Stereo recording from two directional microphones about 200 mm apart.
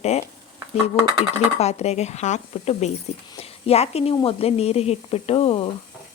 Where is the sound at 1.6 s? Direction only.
30° left (ahead or behind).